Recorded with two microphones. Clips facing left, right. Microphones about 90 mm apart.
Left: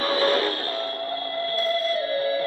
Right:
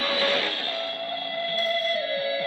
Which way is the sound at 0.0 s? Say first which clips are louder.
Left 4 dB; 35° left (ahead or behind).